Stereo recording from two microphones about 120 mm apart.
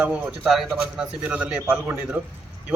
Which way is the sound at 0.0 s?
10° right (ahead or behind).